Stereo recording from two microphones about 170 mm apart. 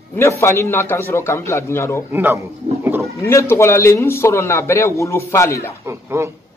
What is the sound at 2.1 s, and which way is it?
Speech, 10° right (ahead or behind).